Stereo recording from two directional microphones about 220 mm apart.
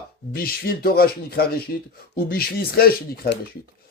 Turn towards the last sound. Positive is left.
turn(degrees=45)  # may be behind; listen again after turning